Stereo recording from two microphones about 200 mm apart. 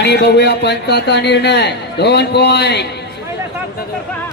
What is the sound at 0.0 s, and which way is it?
Speech, 55° left (ahead or behind).